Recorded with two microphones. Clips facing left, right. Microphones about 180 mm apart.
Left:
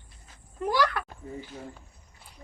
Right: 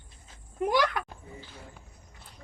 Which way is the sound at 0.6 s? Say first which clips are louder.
Even; 20° right (ahead or behind).